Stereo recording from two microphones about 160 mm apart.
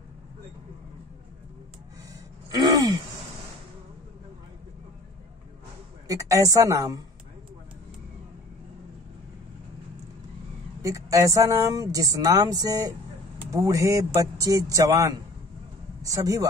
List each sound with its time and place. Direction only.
2.5 s gasp: 25° right (ahead or behind)
6.0 s a woman's voice: 20° right (ahead or behind)
10.8 s speech: 20° right (ahead or behind)